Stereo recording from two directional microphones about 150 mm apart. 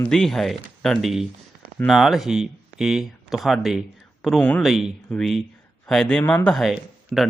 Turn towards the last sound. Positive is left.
turn(degrees=0)  # may be behind; listen again after turning